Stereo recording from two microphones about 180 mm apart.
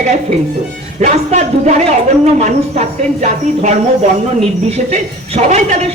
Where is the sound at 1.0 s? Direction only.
40° right (ahead or behind).